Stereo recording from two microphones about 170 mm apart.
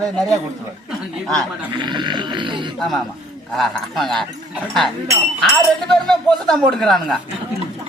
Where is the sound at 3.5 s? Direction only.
Centre (ahead or behind).